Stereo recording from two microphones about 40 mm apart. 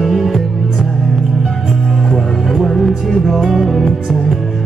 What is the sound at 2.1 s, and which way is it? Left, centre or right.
Music, centre.